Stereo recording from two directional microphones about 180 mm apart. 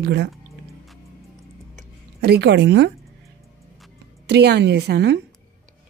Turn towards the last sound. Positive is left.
turn(degrees=-70)  # may be behind; listen again after turning